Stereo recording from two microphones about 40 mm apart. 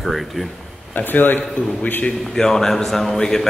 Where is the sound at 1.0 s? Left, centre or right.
Left.